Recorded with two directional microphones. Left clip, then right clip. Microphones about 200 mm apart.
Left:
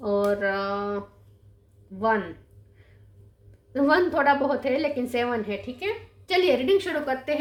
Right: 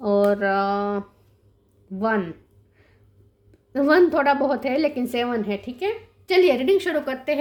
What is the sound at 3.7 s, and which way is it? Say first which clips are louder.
A woman's voice: right 4 dB; 45° right (ahead or behind).